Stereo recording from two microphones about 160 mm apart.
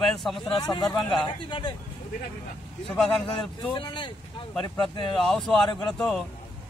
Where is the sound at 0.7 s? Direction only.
25° left (ahead or behind).